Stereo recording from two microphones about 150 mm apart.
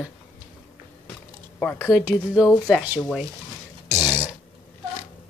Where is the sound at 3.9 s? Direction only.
20° right (ahead or behind).